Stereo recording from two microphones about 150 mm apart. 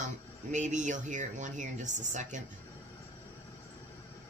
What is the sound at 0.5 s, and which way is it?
Speech, 55° right (ahead or behind).